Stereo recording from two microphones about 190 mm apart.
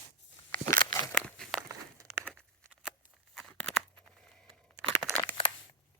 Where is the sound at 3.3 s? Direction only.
5° left (ahead or behind).